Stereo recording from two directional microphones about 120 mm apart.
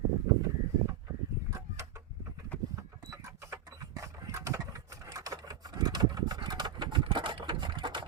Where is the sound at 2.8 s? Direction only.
30° right (ahead or behind).